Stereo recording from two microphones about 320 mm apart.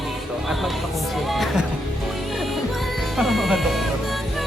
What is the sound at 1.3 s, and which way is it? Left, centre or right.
Music, centre.